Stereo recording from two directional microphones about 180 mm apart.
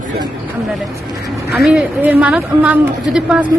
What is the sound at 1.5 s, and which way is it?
A woman's voice, centre (ahead or behind).